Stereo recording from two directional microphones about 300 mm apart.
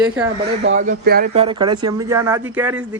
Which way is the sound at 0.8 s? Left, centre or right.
Right.